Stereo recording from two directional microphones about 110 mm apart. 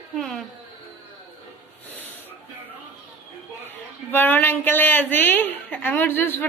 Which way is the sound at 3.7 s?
15° left (ahead or behind).